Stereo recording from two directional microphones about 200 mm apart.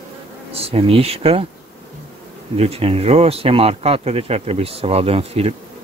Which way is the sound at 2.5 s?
30° right (ahead or behind).